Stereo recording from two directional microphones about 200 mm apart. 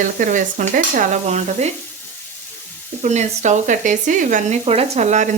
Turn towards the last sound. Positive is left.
turn(degrees=-35)  # may be behind; listen again after turning